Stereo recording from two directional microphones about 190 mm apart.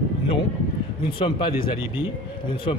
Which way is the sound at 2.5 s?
30° left (ahead or behind).